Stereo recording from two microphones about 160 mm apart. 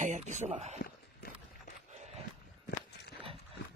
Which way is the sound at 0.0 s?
50° right (ahead or behind).